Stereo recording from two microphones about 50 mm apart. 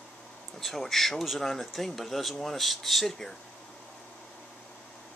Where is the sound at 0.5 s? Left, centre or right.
Centre.